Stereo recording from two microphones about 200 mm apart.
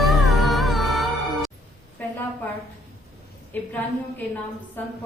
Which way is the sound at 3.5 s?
10° left (ahead or behind).